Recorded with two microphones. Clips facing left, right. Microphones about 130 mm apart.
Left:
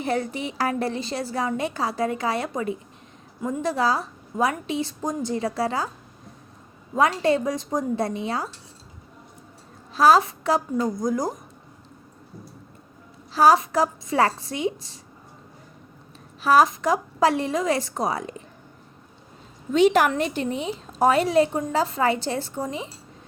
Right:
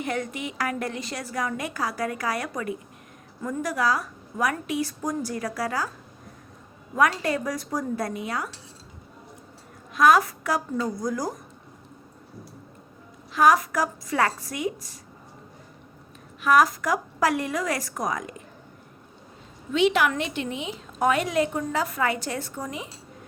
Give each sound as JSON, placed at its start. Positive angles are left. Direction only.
{"t": 0.0, "sound": "a woman's voice", "side_deg": 30}
{"t": 6.9, "sound": "a woman's voice", "side_deg": 25}
{"t": 9.9, "sound": "a woman's voice", "side_deg": 30}
{"t": 13.3, "sound": "a woman's voice", "side_deg": 30}
{"t": 16.4, "sound": "a woman's voice", "side_deg": 30}
{"t": 19.7, "sound": "a woman's voice", "side_deg": 40}